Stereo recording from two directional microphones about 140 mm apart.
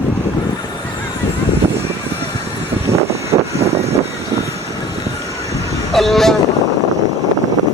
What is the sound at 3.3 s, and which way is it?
Vehicle, 20° right (ahead or behind).